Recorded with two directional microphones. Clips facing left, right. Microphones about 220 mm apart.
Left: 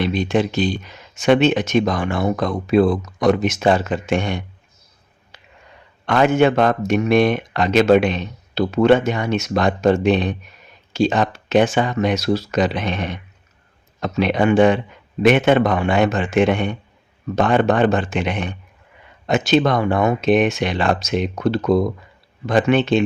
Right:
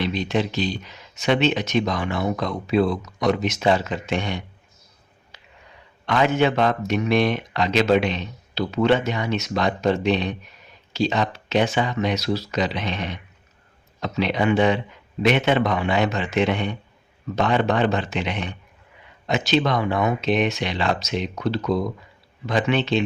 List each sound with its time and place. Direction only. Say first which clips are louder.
0.0 s speech: left 4 dB; 50° left (ahead or behind)
5.3 s a sound: left 3 dB; 50° left (ahead or behind)
6.1 s speech: left 5 dB; 50° left (ahead or behind)